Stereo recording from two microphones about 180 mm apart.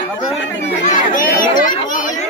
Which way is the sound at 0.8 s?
50° left (ahead or behind).